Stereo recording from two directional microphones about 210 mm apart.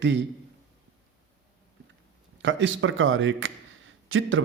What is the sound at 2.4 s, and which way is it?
Speech, 60° right (ahead or behind).